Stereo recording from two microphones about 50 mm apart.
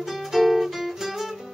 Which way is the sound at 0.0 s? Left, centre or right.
Centre.